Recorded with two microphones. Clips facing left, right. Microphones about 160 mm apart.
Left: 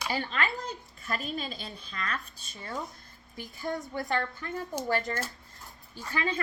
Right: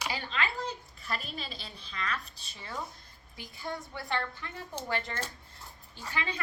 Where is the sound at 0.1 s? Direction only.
50° left (ahead or behind).